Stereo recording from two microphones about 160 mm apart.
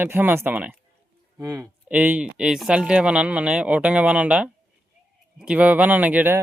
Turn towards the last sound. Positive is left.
turn(degrees=-10)  # may be behind; listen again after turning